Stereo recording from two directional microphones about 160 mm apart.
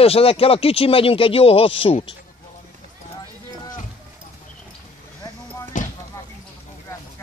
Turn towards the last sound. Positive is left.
turn(degrees=55)  # may be behind; listen again after turning